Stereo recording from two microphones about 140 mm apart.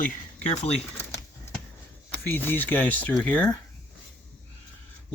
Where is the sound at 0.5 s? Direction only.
55° left (ahead or behind).